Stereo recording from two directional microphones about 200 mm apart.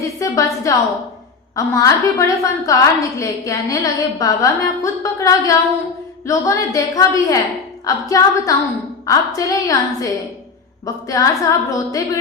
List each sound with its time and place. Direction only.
0.0 s a woman's voice: 15° left (ahead or behind)